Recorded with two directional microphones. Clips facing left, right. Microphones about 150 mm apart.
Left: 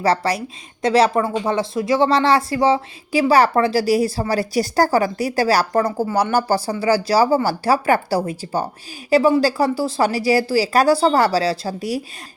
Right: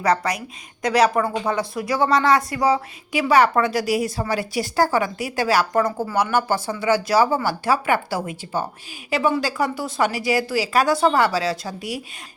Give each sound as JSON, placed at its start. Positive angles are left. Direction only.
{"t": 0.0, "sound": "a woman's voice", "side_deg": 30}